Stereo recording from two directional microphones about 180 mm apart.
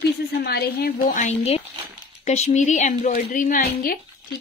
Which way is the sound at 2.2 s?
40° left (ahead or behind).